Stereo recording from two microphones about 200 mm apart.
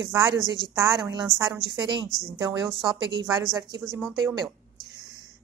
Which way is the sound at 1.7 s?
20° right (ahead or behind).